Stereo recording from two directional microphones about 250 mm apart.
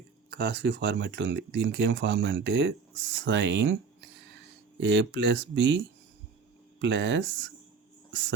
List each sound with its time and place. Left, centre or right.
0.3 s speech: right
4.8 s speech: right